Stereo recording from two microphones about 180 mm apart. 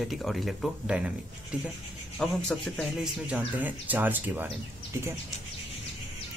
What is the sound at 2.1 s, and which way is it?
Speech, 5° left (ahead or behind).